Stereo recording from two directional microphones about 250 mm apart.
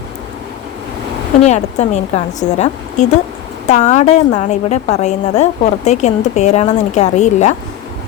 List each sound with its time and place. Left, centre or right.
1.4 s a woman's voice: left